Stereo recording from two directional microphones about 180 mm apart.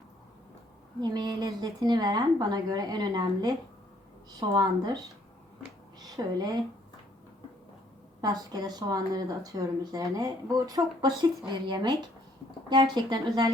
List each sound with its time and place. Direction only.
1.1 s speech: 20° right (ahead or behind)
6.2 s speech: 20° right (ahead or behind)
8.2 s speech: 20° right (ahead or behind)